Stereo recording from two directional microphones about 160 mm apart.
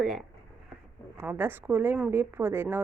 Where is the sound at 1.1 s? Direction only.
15° right (ahead or behind).